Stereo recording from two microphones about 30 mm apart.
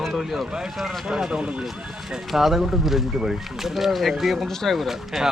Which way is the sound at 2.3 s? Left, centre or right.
Centre.